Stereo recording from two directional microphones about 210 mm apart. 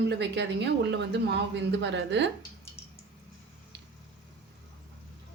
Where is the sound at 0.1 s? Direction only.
55° right (ahead or behind).